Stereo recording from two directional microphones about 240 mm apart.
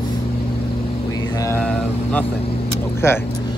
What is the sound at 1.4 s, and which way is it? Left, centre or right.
Speech, centre.